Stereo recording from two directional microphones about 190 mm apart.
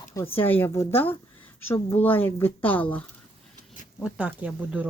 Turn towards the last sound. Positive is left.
turn(degrees=-10)  # may be behind; listen again after turning